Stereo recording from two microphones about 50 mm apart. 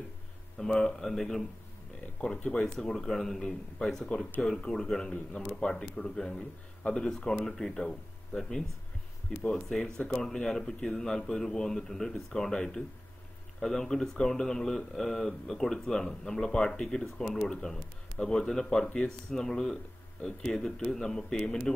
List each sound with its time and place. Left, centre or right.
0.6 s speech: centre
2.2 s speech: left
2.8 s speech: centre